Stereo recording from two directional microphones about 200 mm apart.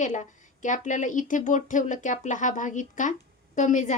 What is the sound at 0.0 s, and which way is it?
Speech, 40° left (ahead or behind).